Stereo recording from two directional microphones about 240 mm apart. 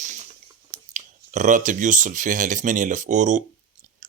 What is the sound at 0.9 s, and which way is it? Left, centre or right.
Speech, right.